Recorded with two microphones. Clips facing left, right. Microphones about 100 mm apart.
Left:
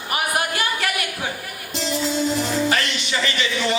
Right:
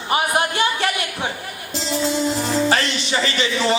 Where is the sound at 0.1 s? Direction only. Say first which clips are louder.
Right 4 dB; 25° right (ahead or behind).